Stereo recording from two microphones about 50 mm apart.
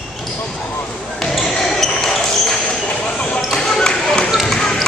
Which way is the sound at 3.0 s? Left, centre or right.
Left.